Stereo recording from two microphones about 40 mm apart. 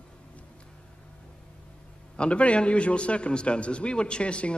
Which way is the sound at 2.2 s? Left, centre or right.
Left.